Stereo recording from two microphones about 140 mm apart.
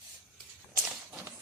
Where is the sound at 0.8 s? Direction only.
5° right (ahead or behind).